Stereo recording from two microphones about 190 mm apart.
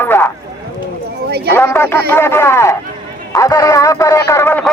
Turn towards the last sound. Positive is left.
turn(degrees=10)  # may be behind; listen again after turning